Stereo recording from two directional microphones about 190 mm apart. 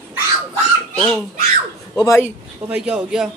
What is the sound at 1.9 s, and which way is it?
Speech, 15° left (ahead or behind).